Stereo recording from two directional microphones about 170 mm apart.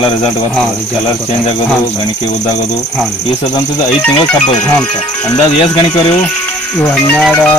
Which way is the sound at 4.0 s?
5° left (ahead or behind).